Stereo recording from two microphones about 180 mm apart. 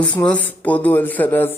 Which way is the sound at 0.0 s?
5° left (ahead or behind).